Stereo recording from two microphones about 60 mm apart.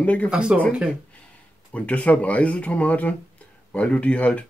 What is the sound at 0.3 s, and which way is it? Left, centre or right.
Speech, centre.